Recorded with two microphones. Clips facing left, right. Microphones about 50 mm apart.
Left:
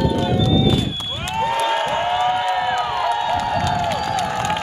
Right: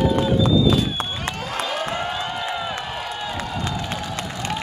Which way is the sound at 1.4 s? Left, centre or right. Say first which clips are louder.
Left 10 dB; left.